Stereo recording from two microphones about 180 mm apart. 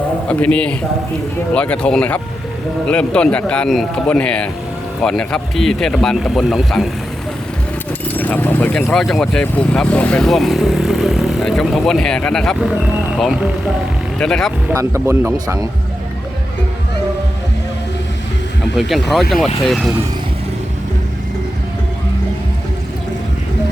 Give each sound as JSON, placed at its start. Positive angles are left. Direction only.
{"t": 0.3, "sound": "speech", "side_deg": 10}
{"t": 8.0, "sound": "speech", "side_deg": 10}
{"t": 14.7, "sound": "speech", "side_deg": -15}
{"t": 18.8, "sound": "speech", "side_deg": 0}